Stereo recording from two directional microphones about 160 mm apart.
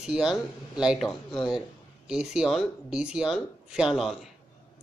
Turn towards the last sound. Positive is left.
turn(degrees=0)  # may be behind; listen again after turning